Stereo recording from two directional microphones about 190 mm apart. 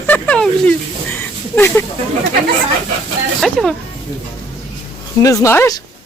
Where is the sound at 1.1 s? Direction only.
10° left (ahead or behind).